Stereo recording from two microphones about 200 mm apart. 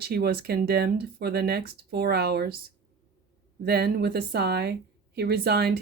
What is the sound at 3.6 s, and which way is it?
Speech, 50° right (ahead or behind).